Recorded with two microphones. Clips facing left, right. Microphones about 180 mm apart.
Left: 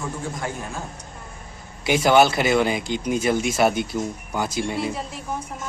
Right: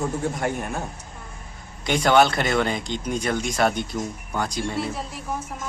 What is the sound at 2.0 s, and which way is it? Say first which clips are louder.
A woman's voice: left 1 dB; 5° left (ahead or behind).